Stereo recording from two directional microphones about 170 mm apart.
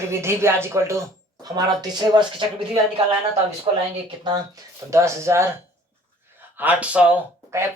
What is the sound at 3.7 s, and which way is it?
Speech, 30° right (ahead or behind).